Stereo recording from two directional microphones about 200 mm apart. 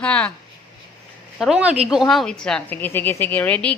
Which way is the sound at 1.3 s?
Centre (ahead or behind).